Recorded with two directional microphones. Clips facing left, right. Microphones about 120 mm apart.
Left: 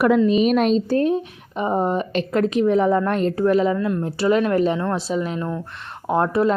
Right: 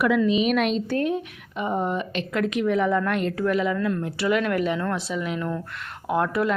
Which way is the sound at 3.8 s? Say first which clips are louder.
Left 3 dB; 20° left (ahead or behind).